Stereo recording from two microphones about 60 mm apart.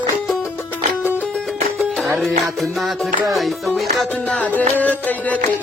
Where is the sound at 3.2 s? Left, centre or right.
Centre.